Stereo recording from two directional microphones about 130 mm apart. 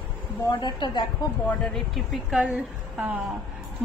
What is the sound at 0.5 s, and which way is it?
Speech, 35° left (ahead or behind).